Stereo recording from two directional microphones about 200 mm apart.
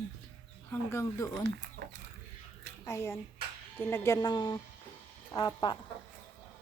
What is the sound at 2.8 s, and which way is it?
Speech, 15° left (ahead or behind).